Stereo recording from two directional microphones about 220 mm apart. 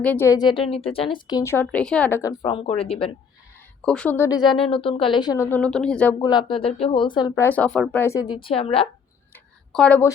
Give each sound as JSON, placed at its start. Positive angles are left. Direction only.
{"t": 0.0, "sound": "a woman's voice", "side_deg": 10}
{"t": 2.4, "sound": "speech", "side_deg": 25}
{"t": 3.8, "sound": "a woman's voice", "side_deg": 5}
{"t": 6.1, "sound": "speech", "side_deg": 20}
{"t": 9.3, "sound": "tick", "side_deg": 5}